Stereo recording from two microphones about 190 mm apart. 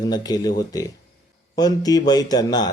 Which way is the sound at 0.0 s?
20° left (ahead or behind).